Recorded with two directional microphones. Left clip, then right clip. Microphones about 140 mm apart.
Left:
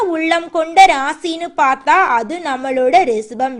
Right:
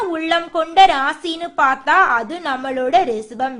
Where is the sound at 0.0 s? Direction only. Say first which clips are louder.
Left 3 dB; 25° left (ahead or behind).